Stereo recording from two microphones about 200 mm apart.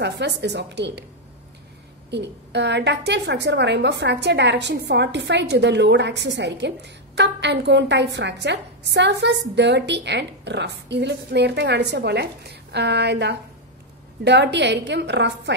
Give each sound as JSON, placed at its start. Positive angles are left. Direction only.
{"t": 0.0, "sound": "a woman's voice", "side_deg": -60}
{"t": 2.0, "sound": "a woman's voice", "side_deg": -60}